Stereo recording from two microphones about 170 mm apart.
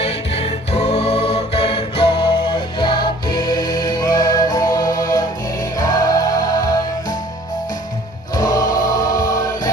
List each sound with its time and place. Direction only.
0.0 s music: 35° left (ahead or behind); by 7.2 s 20° left (ahead or behind)
8.3 s choir: 20° left (ahead or behind)